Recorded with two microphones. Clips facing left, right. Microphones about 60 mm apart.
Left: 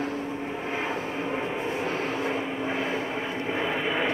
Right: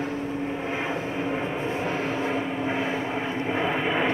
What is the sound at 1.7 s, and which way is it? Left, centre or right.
Vehicle, right.